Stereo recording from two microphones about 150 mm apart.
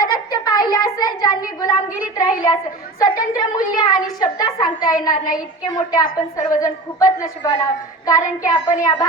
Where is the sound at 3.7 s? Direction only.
25° left (ahead or behind).